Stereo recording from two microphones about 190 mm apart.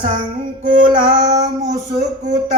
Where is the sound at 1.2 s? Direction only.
40° right (ahead or behind).